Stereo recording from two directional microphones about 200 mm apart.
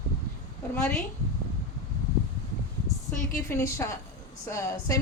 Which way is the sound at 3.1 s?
15° left (ahead or behind).